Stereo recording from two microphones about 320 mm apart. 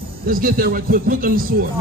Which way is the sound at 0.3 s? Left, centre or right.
Right.